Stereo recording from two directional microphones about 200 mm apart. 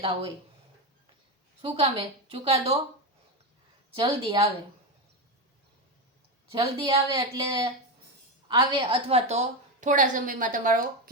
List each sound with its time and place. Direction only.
1.6 s speech: 30° right (ahead or behind)
3.9 s speech: 25° right (ahead or behind)
6.5 s a woman's voice: 25° right (ahead or behind); by 11.1 s 45° right (ahead or behind)